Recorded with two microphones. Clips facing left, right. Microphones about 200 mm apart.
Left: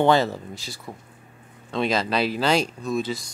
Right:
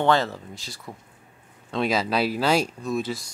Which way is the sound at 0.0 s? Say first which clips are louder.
Left 3 dB; 10° left (ahead or behind).